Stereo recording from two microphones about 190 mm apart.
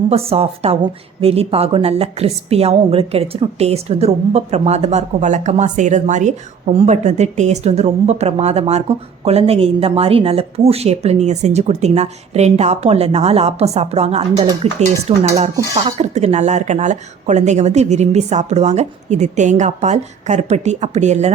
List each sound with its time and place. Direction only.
0.1 s a woman's voice: 30° right (ahead or behind)